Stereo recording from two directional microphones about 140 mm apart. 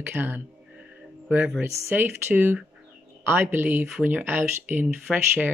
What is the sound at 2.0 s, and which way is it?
Speech, 15° right (ahead or behind).